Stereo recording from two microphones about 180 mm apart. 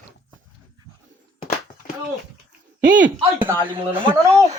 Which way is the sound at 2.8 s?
85° right.